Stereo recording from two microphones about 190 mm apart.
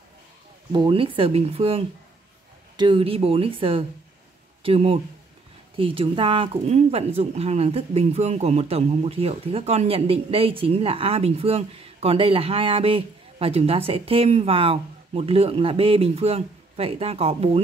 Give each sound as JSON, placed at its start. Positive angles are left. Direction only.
{"t": 0.7, "sound": "speech", "side_deg": -25}